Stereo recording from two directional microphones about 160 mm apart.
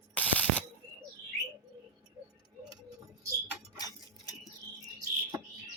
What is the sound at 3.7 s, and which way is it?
Chink, 25° left (ahead or behind).